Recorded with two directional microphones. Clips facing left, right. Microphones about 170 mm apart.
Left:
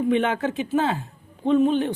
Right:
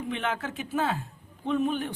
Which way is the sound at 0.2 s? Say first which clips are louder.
Left 8 dB; 60° left (ahead or behind).